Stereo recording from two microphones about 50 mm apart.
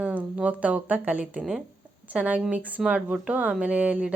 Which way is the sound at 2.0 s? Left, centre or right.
Right.